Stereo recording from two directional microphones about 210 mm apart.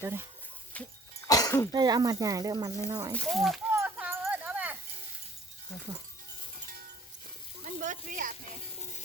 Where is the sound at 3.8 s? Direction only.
5° right (ahead or behind).